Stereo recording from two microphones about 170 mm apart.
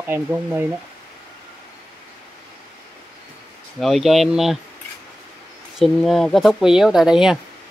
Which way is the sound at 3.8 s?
Centre (ahead or behind).